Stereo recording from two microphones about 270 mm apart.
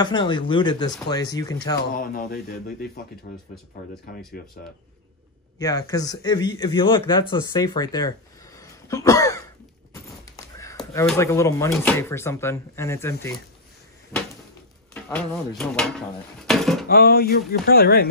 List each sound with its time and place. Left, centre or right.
0.0 s speech: centre
2.0 s speech: left
4.4 s speech: left
5.6 s speech: centre
15.0 s speech: centre
16.4 s a sound: centre
16.9 s speech: left